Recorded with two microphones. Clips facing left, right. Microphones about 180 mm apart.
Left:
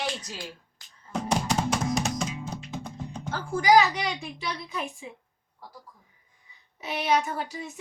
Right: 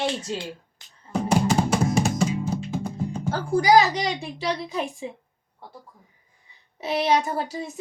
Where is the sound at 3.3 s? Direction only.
35° right (ahead or behind).